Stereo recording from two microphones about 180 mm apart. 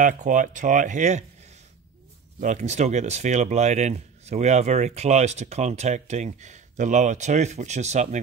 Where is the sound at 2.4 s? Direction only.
40° right (ahead or behind).